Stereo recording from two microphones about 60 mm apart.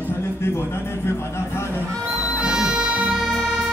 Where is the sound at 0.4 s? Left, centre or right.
Left.